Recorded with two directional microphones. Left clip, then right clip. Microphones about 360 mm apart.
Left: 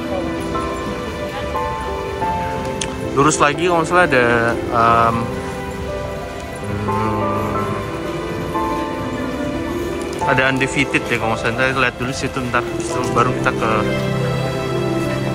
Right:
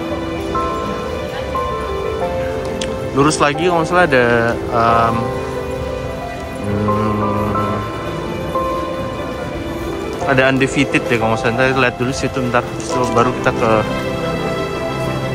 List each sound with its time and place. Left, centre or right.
3.2 s speech: centre
10.2 s a man's voice: centre
13.1 s a man's voice: centre